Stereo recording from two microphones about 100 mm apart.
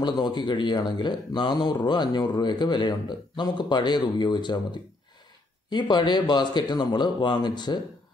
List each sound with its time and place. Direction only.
0.0 s speech: 50° left (ahead or behind)
5.7 s speech: 50° left (ahead or behind)